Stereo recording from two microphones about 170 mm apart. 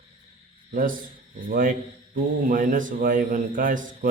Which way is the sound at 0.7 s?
55° right (ahead or behind).